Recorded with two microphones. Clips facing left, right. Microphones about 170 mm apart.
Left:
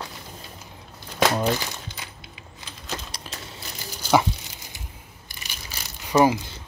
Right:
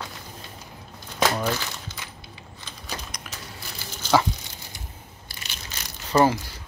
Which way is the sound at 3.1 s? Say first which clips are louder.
Left 1 dB; 30° left (ahead or behind).